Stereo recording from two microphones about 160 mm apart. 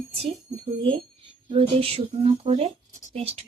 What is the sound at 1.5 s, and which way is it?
Speech, 35° right (ahead or behind).